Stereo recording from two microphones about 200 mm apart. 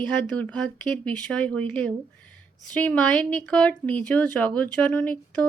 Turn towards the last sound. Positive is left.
turn(degrees=5)  # may be behind; listen again after turning